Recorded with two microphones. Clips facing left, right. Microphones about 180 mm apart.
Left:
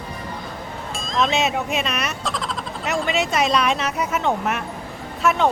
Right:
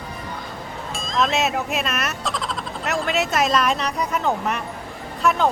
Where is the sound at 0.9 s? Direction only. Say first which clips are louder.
Even; centre (ahead or behind).